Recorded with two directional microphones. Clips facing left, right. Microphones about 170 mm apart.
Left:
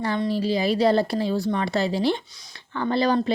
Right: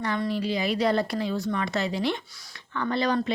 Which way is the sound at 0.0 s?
30° left (ahead or behind).